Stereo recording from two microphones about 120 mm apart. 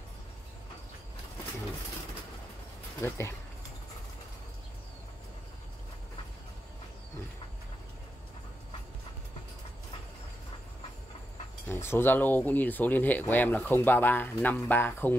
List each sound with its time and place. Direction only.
3.0 s speech: 20° left (ahead or behind)
11.6 s speech: 20° left (ahead or behind)